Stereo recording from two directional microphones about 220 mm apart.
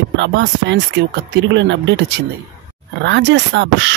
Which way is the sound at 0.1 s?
55° right (ahead or behind).